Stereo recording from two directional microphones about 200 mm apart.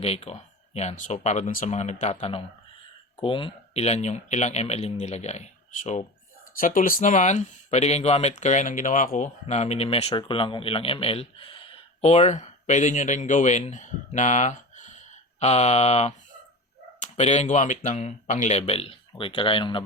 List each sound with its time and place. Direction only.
0.0 s speech: 30° left (ahead or behind)